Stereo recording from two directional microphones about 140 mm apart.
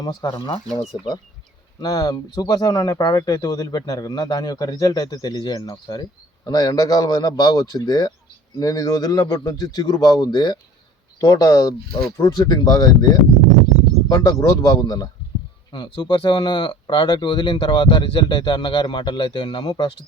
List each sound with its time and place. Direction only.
0.0 s speech: 30° left (ahead or behind)